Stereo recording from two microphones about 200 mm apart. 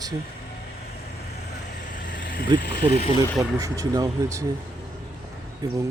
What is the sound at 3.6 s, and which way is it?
Speech, 15° right (ahead or behind).